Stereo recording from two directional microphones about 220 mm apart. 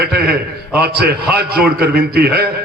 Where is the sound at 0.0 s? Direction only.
45° right (ahead or behind).